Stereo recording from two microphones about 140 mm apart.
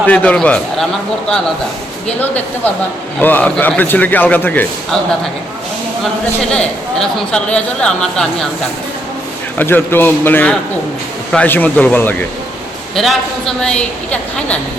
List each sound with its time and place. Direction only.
0.0 s speech: 10° left (ahead or behind)
3.2 s speech: 10° left (ahead or behind)
6.5 s speech: 5° left (ahead or behind)
9.6 s speech: 15° left (ahead or behind)
13.0 s a man's voice: centre (ahead or behind)